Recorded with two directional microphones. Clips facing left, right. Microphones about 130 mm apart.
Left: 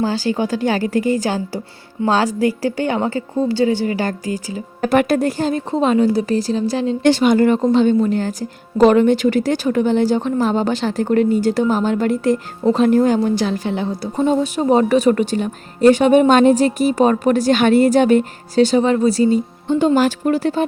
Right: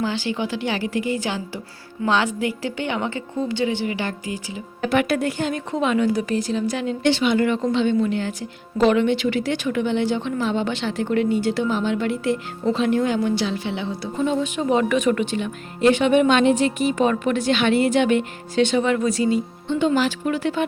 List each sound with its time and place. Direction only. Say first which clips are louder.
0.0 s a woman's voice: left 5 dB; 40° left (ahead or behind)